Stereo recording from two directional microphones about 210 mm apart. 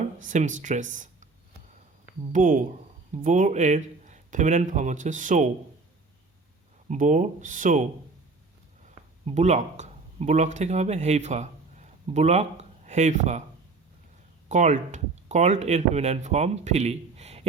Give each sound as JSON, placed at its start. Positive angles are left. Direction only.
{"t": 0.3, "sound": "speech", "side_deg": -35}
{"t": 2.3, "sound": "speech", "side_deg": -40}
{"t": 6.8, "sound": "speech", "side_deg": -35}
{"t": 9.2, "sound": "speech", "side_deg": -35}
{"t": 14.5, "sound": "speech", "side_deg": -35}